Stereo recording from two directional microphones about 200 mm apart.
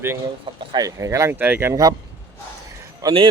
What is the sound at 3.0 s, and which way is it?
Speech, 20° right (ahead or behind).